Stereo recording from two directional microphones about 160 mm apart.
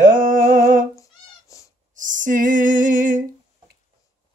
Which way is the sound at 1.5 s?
20° left (ahead or behind).